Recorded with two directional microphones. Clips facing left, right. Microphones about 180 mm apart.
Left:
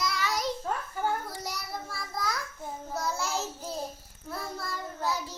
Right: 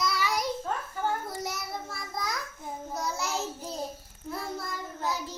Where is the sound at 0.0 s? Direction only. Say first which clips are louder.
Right 1 dB; 10° right (ahead or behind).